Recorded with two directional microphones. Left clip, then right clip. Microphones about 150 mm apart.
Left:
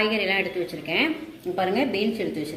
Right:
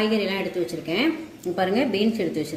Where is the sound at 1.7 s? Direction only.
80° right.